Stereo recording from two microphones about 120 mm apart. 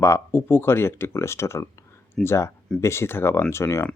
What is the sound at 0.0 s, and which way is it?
Speech, 20° left (ahead or behind).